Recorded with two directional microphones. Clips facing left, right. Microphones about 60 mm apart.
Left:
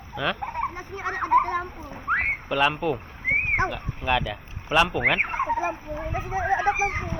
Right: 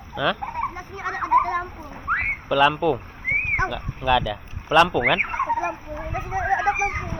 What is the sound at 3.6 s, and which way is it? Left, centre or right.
Speech, left.